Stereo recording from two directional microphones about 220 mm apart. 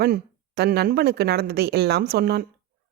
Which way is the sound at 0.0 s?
45° right (ahead or behind).